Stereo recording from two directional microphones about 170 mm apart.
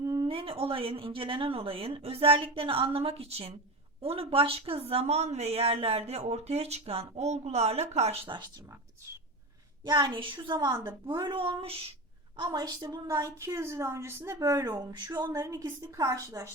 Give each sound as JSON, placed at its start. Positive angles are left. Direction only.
{"t": 0.0, "sound": "a woman's voice", "side_deg": -30}
{"t": 9.8, "sound": "a woman's voice", "side_deg": -25}
{"t": 12.4, "sound": "a woman's voice", "side_deg": -25}